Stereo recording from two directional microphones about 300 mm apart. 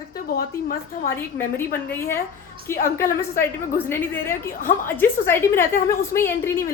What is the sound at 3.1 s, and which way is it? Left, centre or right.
A woman's voice, centre.